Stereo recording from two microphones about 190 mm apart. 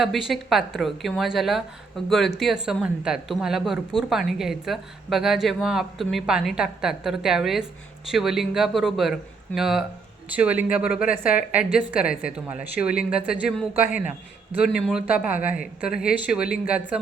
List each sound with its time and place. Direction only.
0.0 s a woman's voice: centre (ahead or behind)
15.9 s speech: 50° left (ahead or behind)
16.1 s speech: 5° right (ahead or behind)